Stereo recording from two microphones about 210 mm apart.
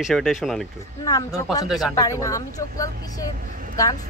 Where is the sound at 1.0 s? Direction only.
15° left (ahead or behind).